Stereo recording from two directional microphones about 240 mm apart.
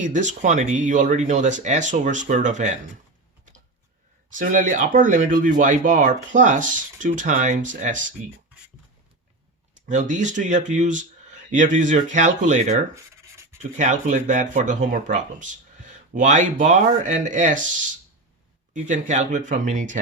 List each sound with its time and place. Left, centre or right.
0.0 s speech: right
4.4 s speech: right
9.7 s speech: right
18.7 s speech: right